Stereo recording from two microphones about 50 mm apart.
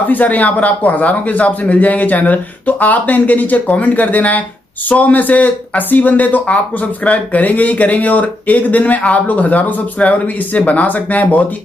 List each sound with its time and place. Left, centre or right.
0.1 s speech: left